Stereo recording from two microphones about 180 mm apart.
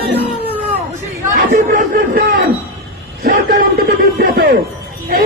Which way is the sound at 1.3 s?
50° right (ahead or behind).